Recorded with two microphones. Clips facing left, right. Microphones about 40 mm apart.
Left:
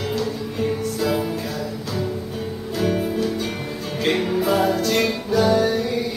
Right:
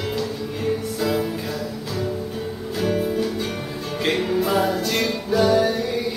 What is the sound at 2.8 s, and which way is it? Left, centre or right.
Music, centre.